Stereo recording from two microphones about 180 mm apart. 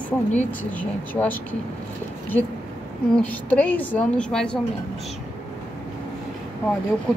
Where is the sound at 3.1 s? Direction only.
5° left (ahead or behind).